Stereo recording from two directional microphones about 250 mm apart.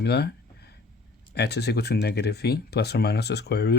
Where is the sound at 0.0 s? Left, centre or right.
Left.